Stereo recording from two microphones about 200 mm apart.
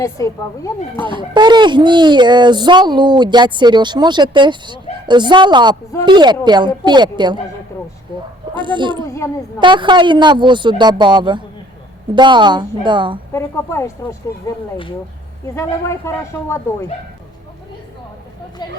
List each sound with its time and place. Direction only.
0.0 s speech: 15° left (ahead or behind)
0.9 s speech: 25° right (ahead or behind)
8.5 s speech: 25° right (ahead or behind)
9.0 s speech: 15° left (ahead or behind)
9.6 s speech: 25° right (ahead or behind)
13.3 s speech: 15° left (ahead or behind)